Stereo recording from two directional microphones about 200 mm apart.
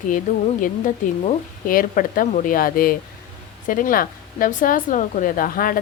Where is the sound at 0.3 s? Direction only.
40° left (ahead or behind).